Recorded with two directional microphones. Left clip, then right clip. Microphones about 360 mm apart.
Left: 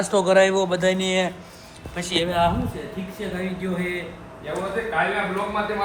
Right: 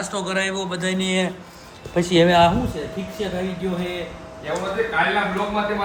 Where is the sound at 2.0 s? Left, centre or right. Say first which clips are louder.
Right 6 dB; centre.